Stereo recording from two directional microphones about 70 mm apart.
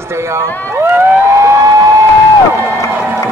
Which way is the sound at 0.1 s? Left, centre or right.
Right.